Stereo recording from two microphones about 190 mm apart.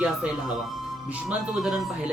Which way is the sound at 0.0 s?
5° right (ahead or behind).